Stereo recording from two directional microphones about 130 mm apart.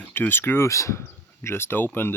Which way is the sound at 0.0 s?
15° left (ahead or behind).